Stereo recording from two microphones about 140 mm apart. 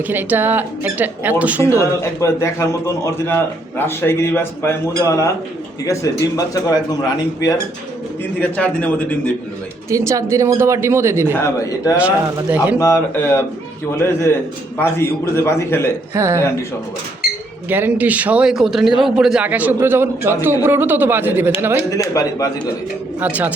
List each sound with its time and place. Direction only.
0.1 s speech: 15° right (ahead or behind)
1.7 s a man's voice: 20° left (ahead or behind)
8.4 s a man's voice: 10° left (ahead or behind)
9.9 s speech: 20° right (ahead or behind)
11.3 s a man's voice: 20° left (ahead or behind)
11.9 s speech: 10° right (ahead or behind)
12.8 s a man's voice: 20° left (ahead or behind)
16.1 s speech: 20° right (ahead or behind)
17.7 s speech: 15° right (ahead or behind)
21.8 s a man's voice: 25° left (ahead or behind)
23.2 s speech: 10° right (ahead or behind)